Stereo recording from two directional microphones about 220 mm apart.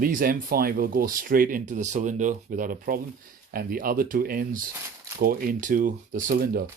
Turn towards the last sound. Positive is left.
turn(degrees=-45)  # may be behind; listen again after turning